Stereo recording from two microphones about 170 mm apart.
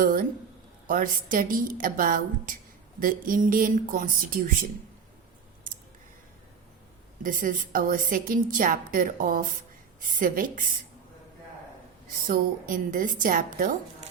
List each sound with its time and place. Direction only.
0.0 s a woman's voice: 55° right (ahead or behind)
7.2 s a woman's voice: 50° right (ahead or behind)
12.3 s a woman's voice: 55° right (ahead or behind)